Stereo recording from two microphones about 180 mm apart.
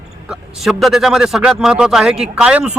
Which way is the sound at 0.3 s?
Centre (ahead or behind).